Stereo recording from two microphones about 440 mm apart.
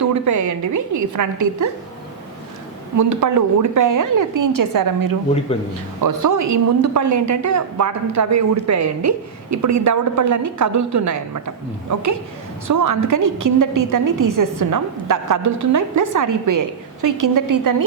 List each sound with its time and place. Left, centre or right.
0.0 s a woman's voice: right
3.0 s a woman's voice: right
12.6 s a woman's voice: right